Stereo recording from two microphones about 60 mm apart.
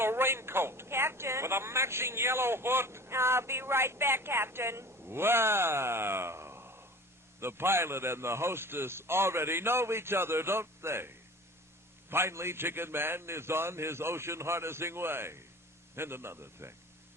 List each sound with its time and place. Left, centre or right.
0.0 s a woman's voice: right